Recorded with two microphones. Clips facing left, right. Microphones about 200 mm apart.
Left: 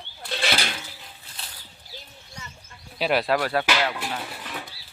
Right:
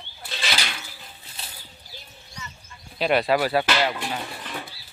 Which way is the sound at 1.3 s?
5° right (ahead or behind).